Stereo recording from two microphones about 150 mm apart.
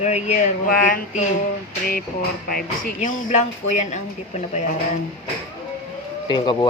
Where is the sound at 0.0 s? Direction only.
50° left (ahead or behind).